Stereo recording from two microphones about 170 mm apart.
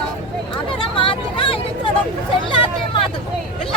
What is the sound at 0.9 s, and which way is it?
Vehicle, 30° left (ahead or behind).